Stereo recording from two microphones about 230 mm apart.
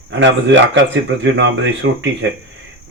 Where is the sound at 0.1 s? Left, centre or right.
Right.